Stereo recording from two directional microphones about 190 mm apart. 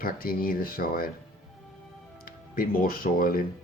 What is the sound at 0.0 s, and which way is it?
Speech, 50° left (ahead or behind).